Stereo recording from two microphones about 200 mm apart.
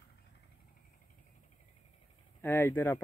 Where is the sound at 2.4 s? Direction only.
10° left (ahead or behind).